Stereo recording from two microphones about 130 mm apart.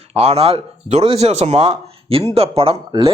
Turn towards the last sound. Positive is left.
turn(degrees=-45)  # may be behind; listen again after turning